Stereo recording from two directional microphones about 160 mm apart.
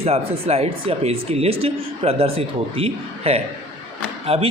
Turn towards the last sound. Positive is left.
turn(degrees=-35)  # may be behind; listen again after turning